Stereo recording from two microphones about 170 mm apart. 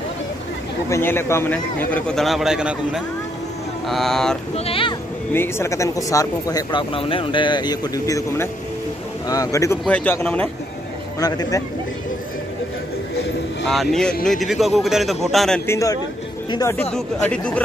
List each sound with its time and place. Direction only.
0.8 s a man's voice: 15° left (ahead or behind)
4.6 s speech: 30° left (ahead or behind)
5.3 s a man's voice: 15° left (ahead or behind)
11.1 s speech: 20° left (ahead or behind)
13.7 s speech: centre (ahead or behind)
15.6 s a man's voice: 15° left (ahead or behind)
16.9 s a man's voice: 5° left (ahead or behind)